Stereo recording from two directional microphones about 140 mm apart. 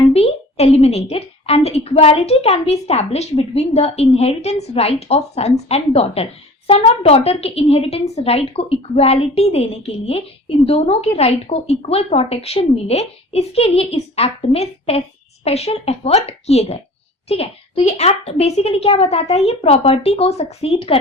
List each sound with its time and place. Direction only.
0.1 s a woman's voice: 45° left (ahead or behind)